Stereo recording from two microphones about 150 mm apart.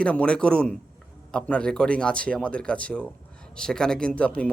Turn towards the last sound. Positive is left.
turn(degrees=10)  # may be behind; listen again after turning